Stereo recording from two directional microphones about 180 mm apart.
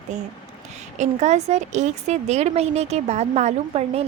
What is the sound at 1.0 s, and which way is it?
Speech, 40° right (ahead or behind).